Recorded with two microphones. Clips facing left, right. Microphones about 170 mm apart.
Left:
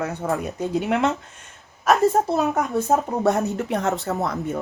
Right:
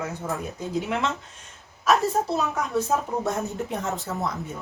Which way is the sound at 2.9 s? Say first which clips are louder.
Left 7 dB; 50° left (ahead or behind).